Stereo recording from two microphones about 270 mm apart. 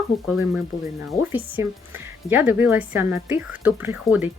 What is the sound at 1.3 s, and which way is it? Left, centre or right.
Speech, centre.